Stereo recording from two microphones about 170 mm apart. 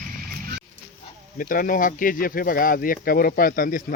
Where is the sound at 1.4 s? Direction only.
55° left (ahead or behind).